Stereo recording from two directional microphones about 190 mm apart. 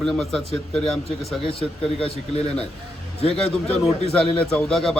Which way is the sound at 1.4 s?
30° left (ahead or behind).